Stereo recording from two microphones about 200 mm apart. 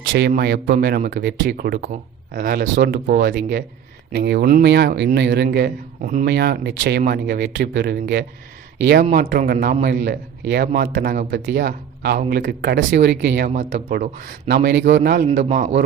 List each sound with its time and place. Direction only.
0.1 s speech: 55° right (ahead or behind)
6.2 s speech: 55° right (ahead or behind)
9.0 s a man's voice: 40° right (ahead or behind); by 15.1 s 60° right (ahead or behind)
15.1 s a man's voice: 40° right (ahead or behind)